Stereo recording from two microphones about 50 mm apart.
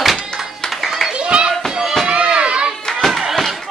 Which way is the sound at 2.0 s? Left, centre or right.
Right.